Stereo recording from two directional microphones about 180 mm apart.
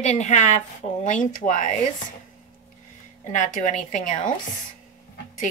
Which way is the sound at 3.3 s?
45° left (ahead or behind).